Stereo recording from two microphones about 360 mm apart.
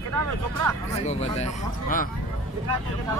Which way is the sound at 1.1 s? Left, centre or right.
Centre.